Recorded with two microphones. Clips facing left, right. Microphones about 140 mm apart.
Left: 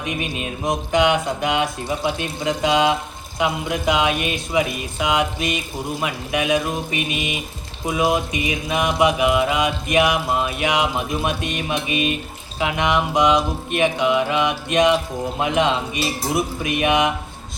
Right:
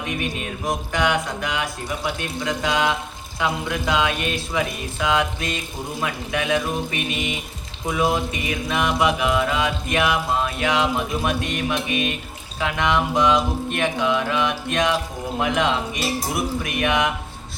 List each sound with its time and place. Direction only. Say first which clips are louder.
0.0 s speech: left 1 dB; 20° left (ahead or behind)
3.3 s mantra: left 2 dB; 20° left (ahead or behind)
12.5 s speech: left 1 dB; 20° left (ahead or behind)